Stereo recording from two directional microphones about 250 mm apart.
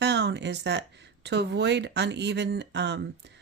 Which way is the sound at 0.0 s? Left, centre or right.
Right.